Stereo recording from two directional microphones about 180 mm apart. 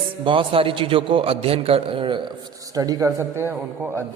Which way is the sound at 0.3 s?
30° right (ahead or behind).